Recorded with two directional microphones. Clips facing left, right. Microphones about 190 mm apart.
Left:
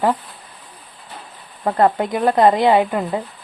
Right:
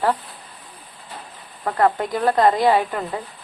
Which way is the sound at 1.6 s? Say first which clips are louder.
Left 3 dB; 25° left (ahead or behind).